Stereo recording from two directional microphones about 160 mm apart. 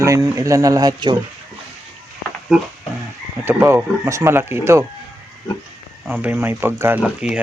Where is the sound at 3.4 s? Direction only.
15° right (ahead or behind).